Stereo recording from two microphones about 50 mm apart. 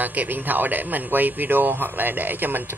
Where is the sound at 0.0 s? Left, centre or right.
Right.